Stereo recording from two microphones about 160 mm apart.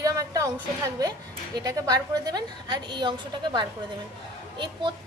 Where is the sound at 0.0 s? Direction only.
20° right (ahead or behind).